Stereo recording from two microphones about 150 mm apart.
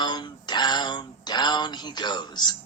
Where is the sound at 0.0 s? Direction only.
30° left (ahead or behind).